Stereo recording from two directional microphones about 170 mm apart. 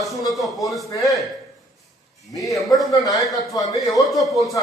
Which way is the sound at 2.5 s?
Centre (ahead or behind).